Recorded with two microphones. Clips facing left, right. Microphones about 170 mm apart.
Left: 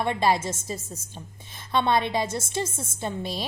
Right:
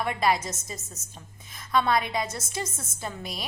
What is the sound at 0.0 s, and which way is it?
A woman's voice, 30° left (ahead or behind).